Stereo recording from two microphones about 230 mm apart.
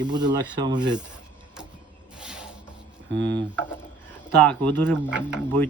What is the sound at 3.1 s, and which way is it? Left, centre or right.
Speech, right.